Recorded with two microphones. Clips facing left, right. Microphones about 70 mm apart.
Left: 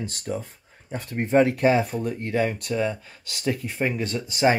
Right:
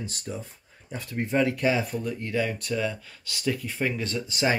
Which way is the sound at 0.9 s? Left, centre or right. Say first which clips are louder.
Left 4 dB; left.